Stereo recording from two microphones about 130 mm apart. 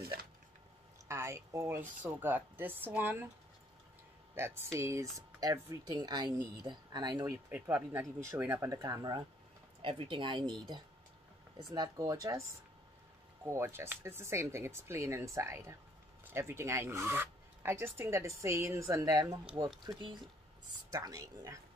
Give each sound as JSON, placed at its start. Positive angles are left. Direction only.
{"t": 1.0, "sound": "speech", "side_deg": -20}
{"t": 4.4, "sound": "speech", "side_deg": -20}
{"t": 7.4, "sound": "speech", "side_deg": -15}
{"t": 8.7, "sound": "speech", "side_deg": -30}
{"t": 13.5, "sound": "speech", "side_deg": -20}
{"t": 19.8, "sound": "speech", "side_deg": -35}